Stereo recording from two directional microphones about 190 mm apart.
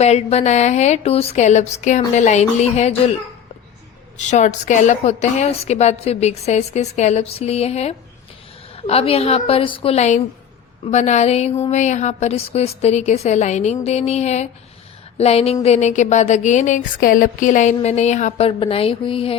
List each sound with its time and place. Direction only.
0.0 s a woman's voice: 35° left (ahead or behind)
4.2 s a woman's voice: 40° left (ahead or behind)